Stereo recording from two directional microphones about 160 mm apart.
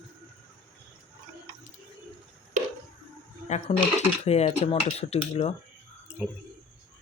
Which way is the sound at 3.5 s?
45° left (ahead or behind).